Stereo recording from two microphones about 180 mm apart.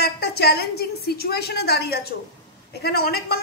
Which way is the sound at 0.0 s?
60° left (ahead or behind).